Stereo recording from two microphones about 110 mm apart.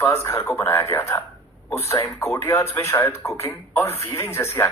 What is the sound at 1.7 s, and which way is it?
Speech, 25° left (ahead or behind).